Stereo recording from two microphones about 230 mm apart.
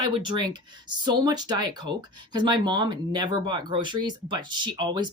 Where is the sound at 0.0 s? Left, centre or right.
Centre.